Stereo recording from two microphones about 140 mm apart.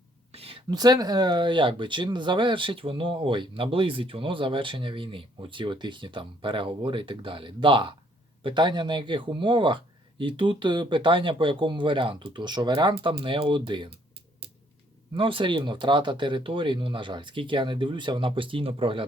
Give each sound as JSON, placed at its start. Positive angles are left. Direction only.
{"t": 0.3, "sound": "a sound", "side_deg": -45}
{"t": 0.7, "sound": "speech", "side_deg": -30}
{"t": 15.1, "sound": "speech", "side_deg": -40}